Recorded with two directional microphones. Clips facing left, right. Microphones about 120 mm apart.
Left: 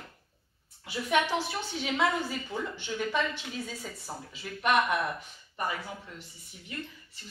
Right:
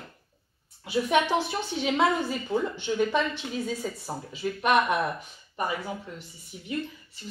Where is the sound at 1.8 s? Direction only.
25° right (ahead or behind).